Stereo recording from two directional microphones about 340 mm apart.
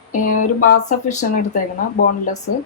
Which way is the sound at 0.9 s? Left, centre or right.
Left.